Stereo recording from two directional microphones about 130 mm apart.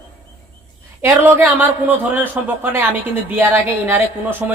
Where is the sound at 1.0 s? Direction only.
15° right (ahead or behind).